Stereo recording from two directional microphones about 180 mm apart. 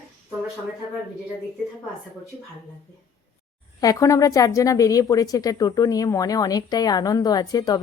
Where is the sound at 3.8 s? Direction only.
20° left (ahead or behind).